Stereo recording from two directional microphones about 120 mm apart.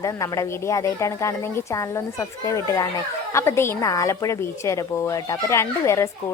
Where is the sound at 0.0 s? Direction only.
25° left (ahead or behind).